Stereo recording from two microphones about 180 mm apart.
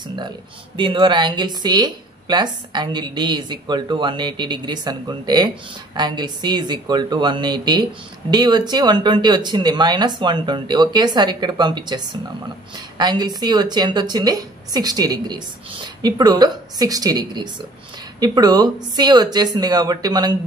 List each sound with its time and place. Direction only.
0.7 s speech: 25° right (ahead or behind)